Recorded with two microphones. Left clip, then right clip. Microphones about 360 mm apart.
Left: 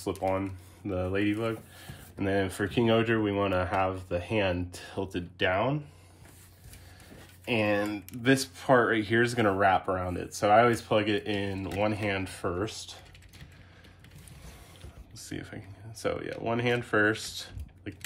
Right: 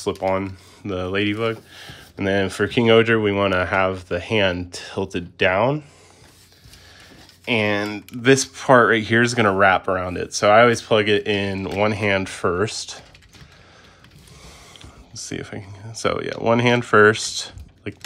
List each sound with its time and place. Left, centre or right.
0.0 s speech: centre
7.4 s speech: centre
15.2 s speech: centre